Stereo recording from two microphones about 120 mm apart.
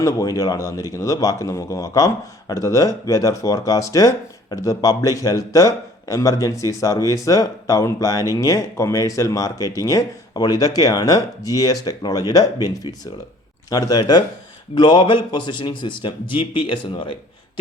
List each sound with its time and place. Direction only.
0.0 s a man's voice: 25° left (ahead or behind)